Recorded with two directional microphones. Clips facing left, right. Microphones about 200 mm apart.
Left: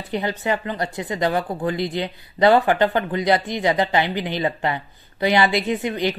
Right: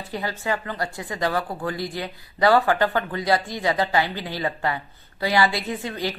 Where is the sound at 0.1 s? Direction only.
20° left (ahead or behind).